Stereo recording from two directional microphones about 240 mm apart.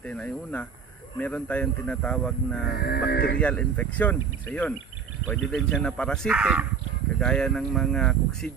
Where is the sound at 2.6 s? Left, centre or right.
Left.